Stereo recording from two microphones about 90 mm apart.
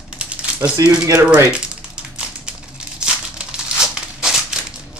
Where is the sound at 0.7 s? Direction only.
40° right (ahead or behind).